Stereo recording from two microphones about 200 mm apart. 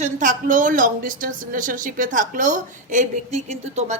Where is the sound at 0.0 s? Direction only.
40° right (ahead or behind).